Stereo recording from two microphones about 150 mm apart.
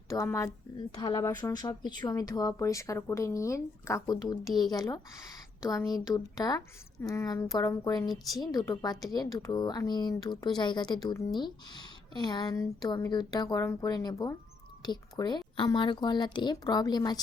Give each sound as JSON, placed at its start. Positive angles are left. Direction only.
{"t": 0.1, "sound": "speech", "side_deg": 20}